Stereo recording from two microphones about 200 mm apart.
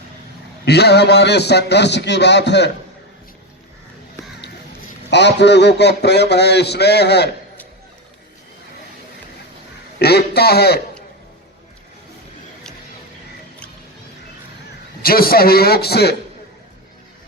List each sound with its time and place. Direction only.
0.6 s a man's voice: 55° left (ahead or behind)
5.1 s a man's voice: 60° left (ahead or behind)
10.0 s a man's voice: 55° left (ahead or behind)
15.0 s a man's voice: 50° left (ahead or behind)